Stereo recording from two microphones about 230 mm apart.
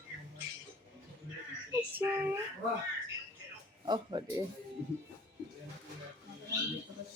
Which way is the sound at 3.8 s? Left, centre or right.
Centre.